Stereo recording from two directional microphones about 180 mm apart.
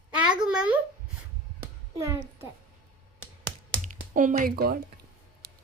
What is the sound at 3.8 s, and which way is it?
Speech, 45° right (ahead or behind).